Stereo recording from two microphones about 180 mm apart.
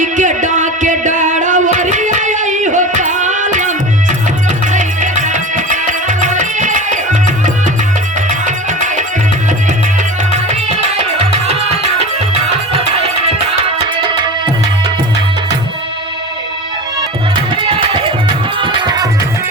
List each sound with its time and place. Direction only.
0.0 s music: 45° right (ahead or behind)
10.3 s music: 40° right (ahead or behind)
12.7 s music: 35° right (ahead or behind)
18.6 s music: 25° right (ahead or behind)